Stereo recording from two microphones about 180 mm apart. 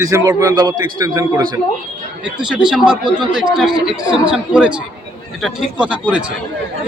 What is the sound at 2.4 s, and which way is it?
Speech, 5° right (ahead or behind).